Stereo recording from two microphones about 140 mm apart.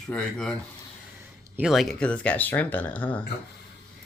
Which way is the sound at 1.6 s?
Centre (ahead or behind).